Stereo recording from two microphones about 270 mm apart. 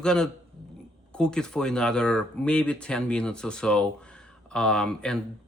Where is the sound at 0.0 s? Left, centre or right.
Centre.